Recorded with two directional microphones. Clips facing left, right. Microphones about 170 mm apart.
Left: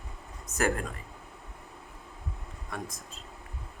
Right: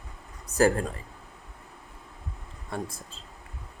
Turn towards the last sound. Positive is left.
turn(degrees=-30)  # may be behind; listen again after turning